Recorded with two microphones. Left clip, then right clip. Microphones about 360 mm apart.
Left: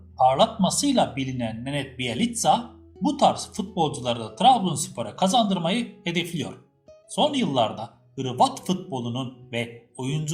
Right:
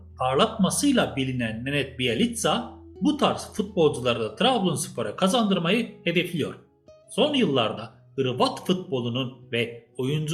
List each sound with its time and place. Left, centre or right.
0.3 s speech: centre